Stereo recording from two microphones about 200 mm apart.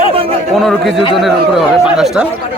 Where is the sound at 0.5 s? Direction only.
Centre (ahead or behind).